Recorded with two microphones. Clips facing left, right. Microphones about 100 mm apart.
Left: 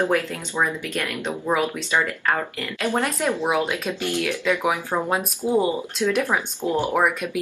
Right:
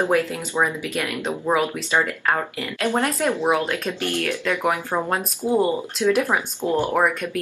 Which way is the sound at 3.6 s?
15° left (ahead or behind).